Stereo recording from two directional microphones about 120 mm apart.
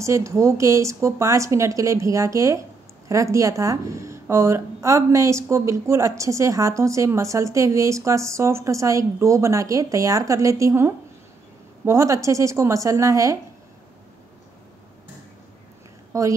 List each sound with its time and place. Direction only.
0.0 s a woman's voice: 25° right (ahead or behind)
16.1 s speech: 25° right (ahead or behind)